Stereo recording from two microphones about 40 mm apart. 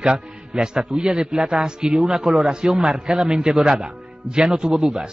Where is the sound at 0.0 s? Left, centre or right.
Right.